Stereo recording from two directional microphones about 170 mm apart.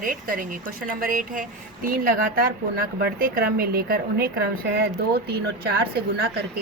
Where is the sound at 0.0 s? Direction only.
55° right (ahead or behind).